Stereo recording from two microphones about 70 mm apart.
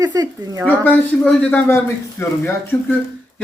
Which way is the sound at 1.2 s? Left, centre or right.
Centre.